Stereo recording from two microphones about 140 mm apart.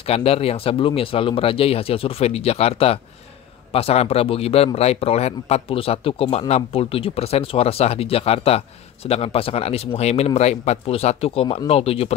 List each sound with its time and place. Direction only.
0.0 s speech: 45° left (ahead or behind)